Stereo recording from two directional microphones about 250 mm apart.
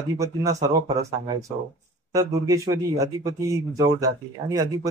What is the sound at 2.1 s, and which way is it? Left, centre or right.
Speech, centre.